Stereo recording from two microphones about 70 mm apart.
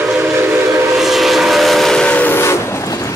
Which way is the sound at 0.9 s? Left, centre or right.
Centre.